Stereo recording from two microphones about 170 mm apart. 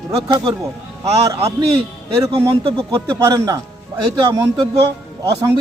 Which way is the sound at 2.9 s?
20° right (ahead or behind).